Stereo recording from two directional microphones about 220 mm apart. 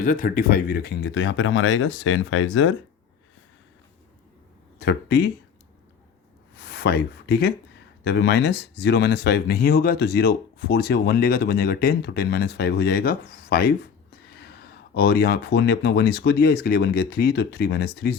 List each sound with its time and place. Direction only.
0.0 s speech: 35° left (ahead or behind); by 2.7 s 60° left (ahead or behind)
4.8 s speech: 50° left (ahead or behind)
6.6 s a sound: 50° left (ahead or behind)
8.0 s speech: 50° left (ahead or behind)